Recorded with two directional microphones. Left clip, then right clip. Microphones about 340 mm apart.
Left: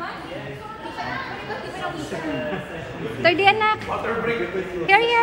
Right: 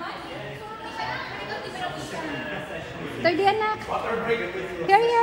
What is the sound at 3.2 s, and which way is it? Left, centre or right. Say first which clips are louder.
Speech: left 5 dB; centre.